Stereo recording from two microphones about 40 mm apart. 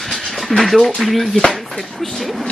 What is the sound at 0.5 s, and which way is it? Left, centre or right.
Speech, centre.